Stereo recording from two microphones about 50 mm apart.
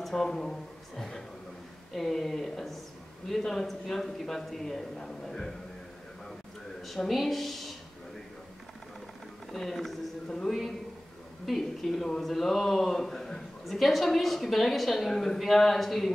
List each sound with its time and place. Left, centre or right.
0.0 s a man's voice: centre
6.8 s speech: centre
9.5 s speech: centre
11.4 s speech: centre